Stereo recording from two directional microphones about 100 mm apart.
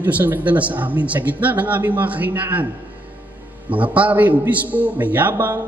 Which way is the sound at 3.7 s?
15° right (ahead or behind).